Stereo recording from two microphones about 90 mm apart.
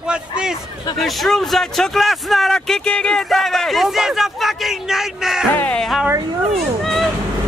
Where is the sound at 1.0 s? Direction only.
Centre (ahead or behind).